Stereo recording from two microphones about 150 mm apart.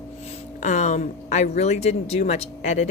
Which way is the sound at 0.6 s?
50° left (ahead or behind).